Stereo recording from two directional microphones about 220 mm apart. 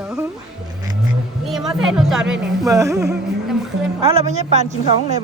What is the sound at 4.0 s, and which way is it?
A woman's voice, 25° right (ahead or behind).